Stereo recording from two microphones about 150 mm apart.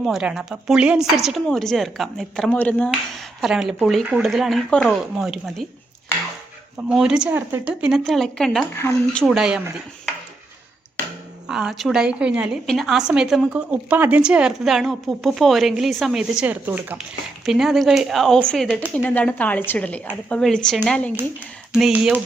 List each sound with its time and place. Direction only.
0.0 s a woman's voice: 5° right (ahead or behind)
3.4 s a woman's voice: centre (ahead or behind)
6.8 s a woman's voice: 5° right (ahead or behind)
8.8 s a woman's voice: 15° left (ahead or behind)
9.2 s a woman's voice: 5° right (ahead or behind)
11.4 s a woman's voice: 5° right (ahead or behind)